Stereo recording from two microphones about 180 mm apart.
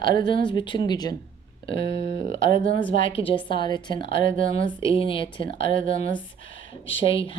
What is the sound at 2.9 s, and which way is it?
Speech, 30° left (ahead or behind).